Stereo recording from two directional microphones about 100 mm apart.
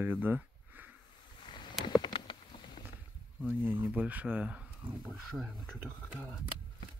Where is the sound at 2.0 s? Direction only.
50° left (ahead or behind).